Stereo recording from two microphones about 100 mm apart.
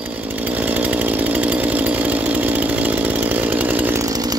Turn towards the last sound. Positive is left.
turn(degrees=-40)  # may be behind; listen again after turning